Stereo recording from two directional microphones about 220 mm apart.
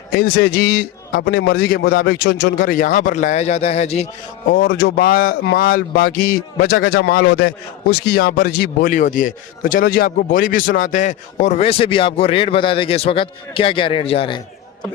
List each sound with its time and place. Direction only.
0.1 s a man's voice: 45° left (ahead or behind); by 4.1 s 30° left (ahead or behind)
4.4 s speech: 40° left (ahead or behind); by 14.4 s 25° left (ahead or behind)